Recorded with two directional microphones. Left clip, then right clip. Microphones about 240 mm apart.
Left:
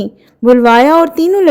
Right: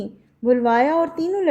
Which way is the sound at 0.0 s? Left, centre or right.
Left.